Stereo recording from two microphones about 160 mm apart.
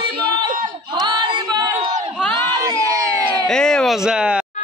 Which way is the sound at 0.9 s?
30° right (ahead or behind).